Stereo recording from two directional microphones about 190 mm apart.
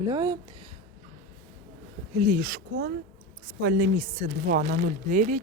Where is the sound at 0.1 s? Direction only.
20° right (ahead or behind).